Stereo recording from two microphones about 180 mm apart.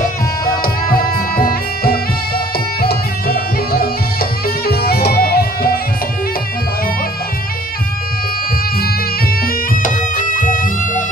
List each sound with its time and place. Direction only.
0.9 s music: 55° left (ahead or behind)
9.8 s music: 45° left (ahead or behind)